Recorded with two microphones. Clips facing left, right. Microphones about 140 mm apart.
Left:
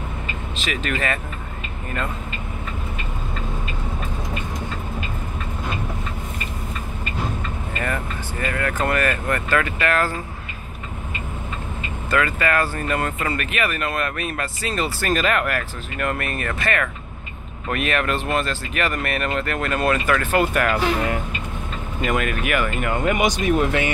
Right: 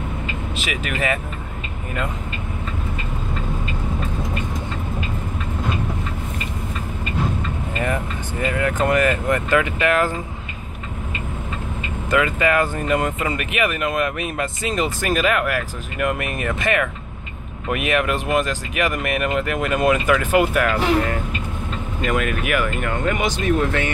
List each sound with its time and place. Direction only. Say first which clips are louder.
0.6 s speech: left 1 dB; 10° right (ahead or behind)
7.8 s speech: right 3 dB; 20° right (ahead or behind)
12.1 s speech: right 2 dB; 15° right (ahead or behind)
20.6 s speech: right 2 dB; 10° left (ahead or behind)